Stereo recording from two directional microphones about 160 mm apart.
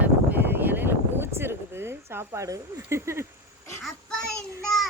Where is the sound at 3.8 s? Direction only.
Centre (ahead or behind).